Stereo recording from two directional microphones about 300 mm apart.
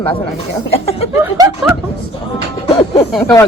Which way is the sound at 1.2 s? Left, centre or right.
Centre.